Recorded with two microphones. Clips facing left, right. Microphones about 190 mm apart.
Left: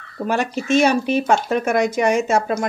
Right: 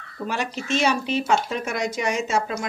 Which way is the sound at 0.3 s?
50° left (ahead or behind).